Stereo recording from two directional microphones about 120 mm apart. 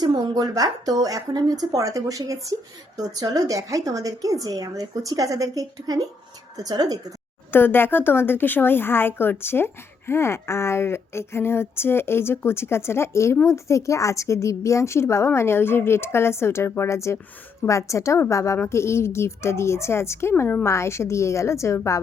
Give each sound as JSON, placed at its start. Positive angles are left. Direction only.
{"t": 0.0, "sound": "a woman's voice", "side_deg": -35}
{"t": 7.5, "sound": "a woman's voice", "side_deg": 15}